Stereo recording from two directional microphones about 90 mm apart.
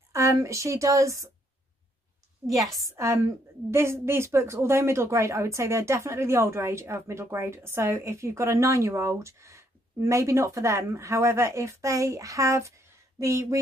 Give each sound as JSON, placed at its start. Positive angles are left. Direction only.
{"t": 0.1, "sound": "a woman's voice", "side_deg": -35}
{"t": 2.7, "sound": "a woman's voice", "side_deg": -35}